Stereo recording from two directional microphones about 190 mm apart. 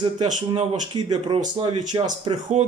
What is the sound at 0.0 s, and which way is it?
Speech, 25° right (ahead or behind).